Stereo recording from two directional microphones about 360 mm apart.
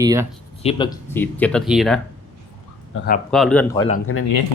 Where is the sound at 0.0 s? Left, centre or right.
Centre.